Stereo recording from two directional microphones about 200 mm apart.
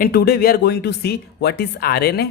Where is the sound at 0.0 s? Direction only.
50° left (ahead or behind).